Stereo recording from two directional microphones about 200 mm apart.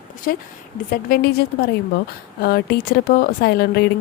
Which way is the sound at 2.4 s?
50° left (ahead or behind).